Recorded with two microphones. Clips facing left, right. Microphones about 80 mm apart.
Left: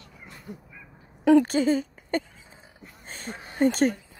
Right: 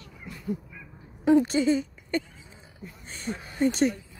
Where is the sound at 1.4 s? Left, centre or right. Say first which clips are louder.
Left 1 dB; left.